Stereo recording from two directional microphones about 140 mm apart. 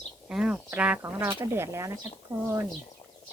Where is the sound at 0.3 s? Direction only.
5° right (ahead or behind); by 2.0 s 20° right (ahead or behind).